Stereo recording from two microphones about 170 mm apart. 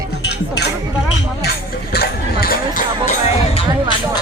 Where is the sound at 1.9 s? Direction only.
65° left (ahead or behind).